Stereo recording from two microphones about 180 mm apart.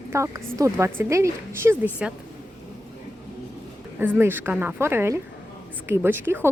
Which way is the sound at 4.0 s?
10° right (ahead or behind).